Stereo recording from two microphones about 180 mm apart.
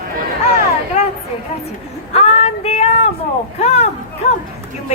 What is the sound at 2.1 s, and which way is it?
Female singing, 35° left (ahead or behind).